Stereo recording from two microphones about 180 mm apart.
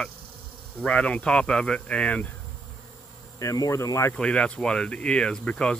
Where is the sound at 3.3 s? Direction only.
20° left (ahead or behind).